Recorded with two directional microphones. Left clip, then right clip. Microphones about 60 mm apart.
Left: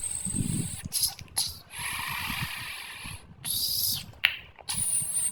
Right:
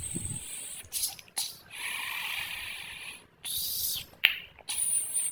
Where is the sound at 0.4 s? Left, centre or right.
Left.